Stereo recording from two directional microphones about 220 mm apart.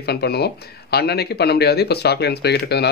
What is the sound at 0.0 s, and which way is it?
Speech, 45° left (ahead or behind).